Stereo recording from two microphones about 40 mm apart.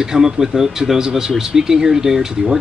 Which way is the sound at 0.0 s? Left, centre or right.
Centre.